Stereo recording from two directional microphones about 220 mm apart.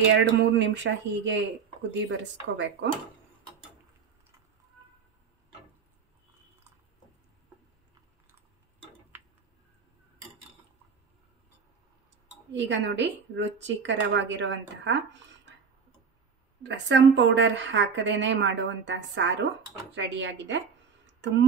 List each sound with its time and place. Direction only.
0.1 s speech: 55° right (ahead or behind)
12.5 s speech: 55° right (ahead or behind)
16.6 s speech: 55° right (ahead or behind)